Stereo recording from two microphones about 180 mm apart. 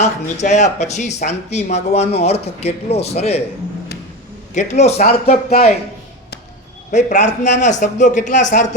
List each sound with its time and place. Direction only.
0.0 s speech: 40° left (ahead or behind)
4.5 s speech: 40° left (ahead or behind)
5.5 s speech: 60° left (ahead or behind)
6.9 s speech: 40° left (ahead or behind)